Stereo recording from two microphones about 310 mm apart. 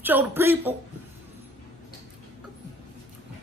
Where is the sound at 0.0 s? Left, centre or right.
Centre.